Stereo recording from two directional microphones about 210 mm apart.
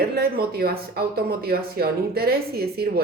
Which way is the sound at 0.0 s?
45° right (ahead or behind).